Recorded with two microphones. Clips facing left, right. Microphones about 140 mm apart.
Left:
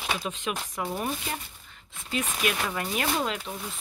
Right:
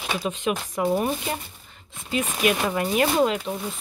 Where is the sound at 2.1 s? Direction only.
5° right (ahead or behind).